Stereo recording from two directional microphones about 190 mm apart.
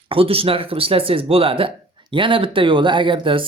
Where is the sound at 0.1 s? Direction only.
30° right (ahead or behind).